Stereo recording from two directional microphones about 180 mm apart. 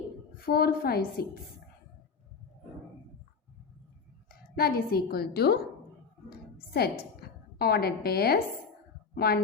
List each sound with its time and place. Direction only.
0.3 s a woman's voice: 55° left (ahead or behind)
4.3 s a woman's voice: 55° left (ahead or behind)
6.3 s a sound: 60° left (ahead or behind)
9.1 s speech: 60° left (ahead or behind)